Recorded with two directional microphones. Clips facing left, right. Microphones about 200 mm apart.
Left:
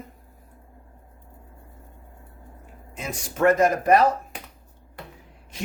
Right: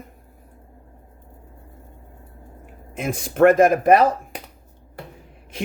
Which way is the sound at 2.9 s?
55° right (ahead or behind).